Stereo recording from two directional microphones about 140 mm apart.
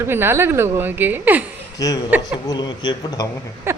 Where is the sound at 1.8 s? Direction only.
25° left (ahead or behind).